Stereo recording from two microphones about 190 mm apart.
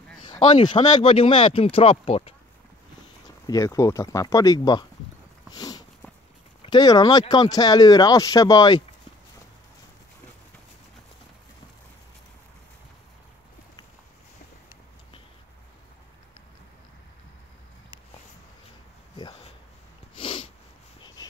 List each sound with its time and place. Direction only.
0.6 s speech: 25° left (ahead or behind)
3.4 s speech: 15° left (ahead or behind)
5.5 s a sound: 20° left (ahead or behind)
6.6 s speech: 20° left (ahead or behind)
20.2 s sneeze: 30° left (ahead or behind)
21.0 s dog: 20° left (ahead or behind)